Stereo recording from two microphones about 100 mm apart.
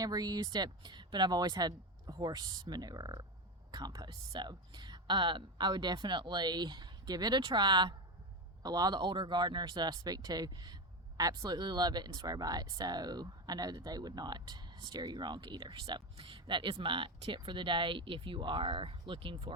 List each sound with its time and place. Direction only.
0.0 s speech: 40° right (ahead or behind)